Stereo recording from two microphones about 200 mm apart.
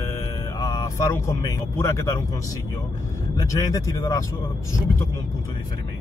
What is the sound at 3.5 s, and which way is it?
Speech, 15° left (ahead or behind).